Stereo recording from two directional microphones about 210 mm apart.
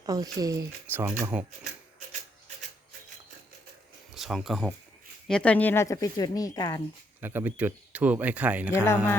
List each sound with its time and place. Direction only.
0.0 s speech: 15° right (ahead or behind)
4.1 s speech: centre (ahead or behind); by 6.8 s 20° left (ahead or behind)
7.2 s speech: 10° right (ahead or behind)
8.7 s speech: 10° left (ahead or behind)